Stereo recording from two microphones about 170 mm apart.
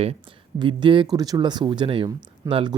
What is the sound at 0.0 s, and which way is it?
Speech, 35° right (ahead or behind).